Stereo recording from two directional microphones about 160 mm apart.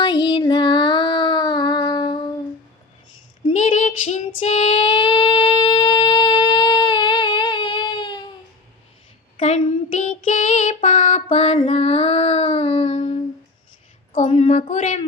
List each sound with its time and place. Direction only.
0.0 s child singing: 30° left (ahead or behind)
3.5 s a sound: 45° left (ahead or behind)
4.3 s female singing: 50° left (ahead or behind); by 8.3 s 30° left (ahead or behind)
9.4 s child singing: 45° left (ahead or behind)
14.1 s a woman's voice: 45° left (ahead or behind)